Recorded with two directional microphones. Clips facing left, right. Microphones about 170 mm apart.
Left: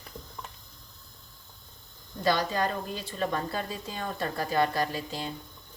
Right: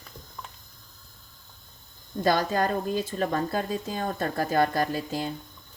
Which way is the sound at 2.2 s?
45° right (ahead or behind).